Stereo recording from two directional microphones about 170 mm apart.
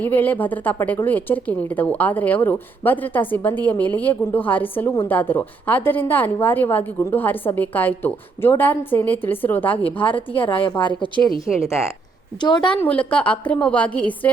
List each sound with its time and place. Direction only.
0.0 s a woman's voice: 10° left (ahead or behind)
10.5 s a woman's voice: 30° left (ahead or behind)
11.6 s a woman's voice: 15° left (ahead or behind)
12.4 s a woman's voice: 25° left (ahead or behind)
12.7 s a woman's voice: 10° left (ahead or behind)